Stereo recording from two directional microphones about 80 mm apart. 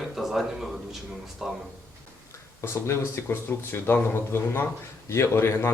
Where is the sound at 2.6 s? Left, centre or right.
Left.